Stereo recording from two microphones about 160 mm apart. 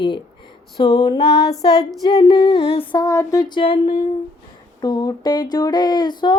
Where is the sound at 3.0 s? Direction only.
20° left (ahead or behind).